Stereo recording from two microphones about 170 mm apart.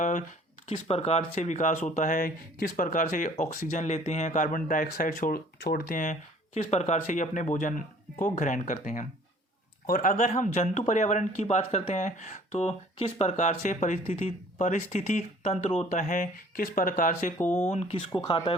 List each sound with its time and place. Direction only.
0.0 s speech: 50° left (ahead or behind)
0.7 s speech: 35° left (ahead or behind); by 17.3 s 50° left (ahead or behind)
17.3 s speech: 10° left (ahead or behind)
17.7 s speech: 40° left (ahead or behind)
18.1 s speech: 25° left (ahead or behind)